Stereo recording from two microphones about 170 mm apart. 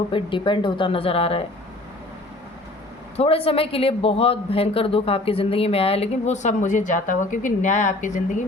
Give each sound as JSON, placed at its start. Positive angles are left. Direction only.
{"t": 0.1, "sound": "speech", "side_deg": 30}
{"t": 3.2, "sound": "speech", "side_deg": 35}